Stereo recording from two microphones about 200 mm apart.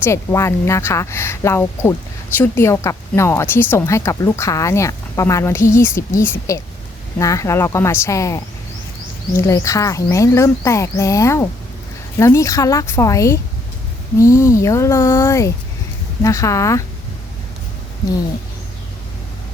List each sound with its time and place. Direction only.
0.0 s speech: 15° left (ahead or behind)